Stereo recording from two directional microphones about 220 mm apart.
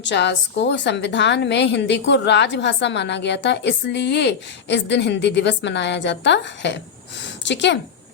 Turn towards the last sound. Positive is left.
turn(degrees=55)  # may be behind; listen again after turning